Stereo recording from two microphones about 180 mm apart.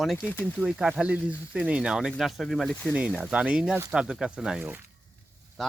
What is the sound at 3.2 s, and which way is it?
Speech, 5° right (ahead or behind).